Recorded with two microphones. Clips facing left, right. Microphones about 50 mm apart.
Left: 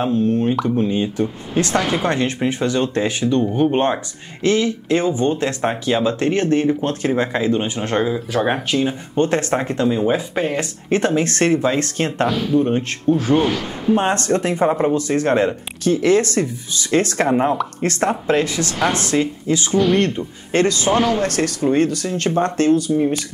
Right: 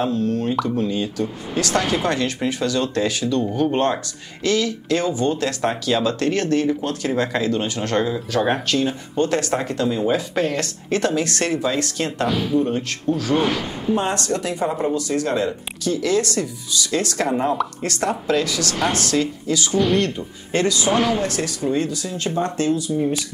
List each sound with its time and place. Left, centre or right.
0.0 s speech: left
9.1 s speech: left
12.3 s speech: centre
12.5 s speech: left
13.4 s speech: centre
13.9 s speech: left